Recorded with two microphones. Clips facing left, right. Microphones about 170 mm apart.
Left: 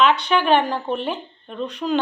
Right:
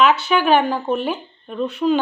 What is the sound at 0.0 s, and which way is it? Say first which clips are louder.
A woman's voice: right 2 dB; 5° right (ahead or behind).